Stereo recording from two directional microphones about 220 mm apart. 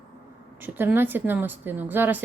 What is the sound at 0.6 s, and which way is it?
A woman's voice, 10° right (ahead or behind).